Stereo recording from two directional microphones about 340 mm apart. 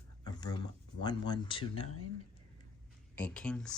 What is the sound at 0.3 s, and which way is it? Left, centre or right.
Speech, centre.